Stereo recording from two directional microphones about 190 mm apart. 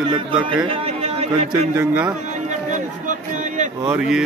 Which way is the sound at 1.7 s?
10° right (ahead or behind).